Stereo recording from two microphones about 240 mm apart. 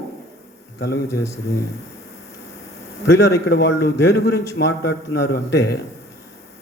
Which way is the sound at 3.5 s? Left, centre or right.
Left.